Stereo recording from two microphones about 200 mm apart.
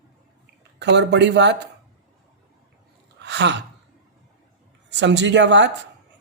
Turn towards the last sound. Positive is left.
turn(degrees=-65)  # may be behind; listen again after turning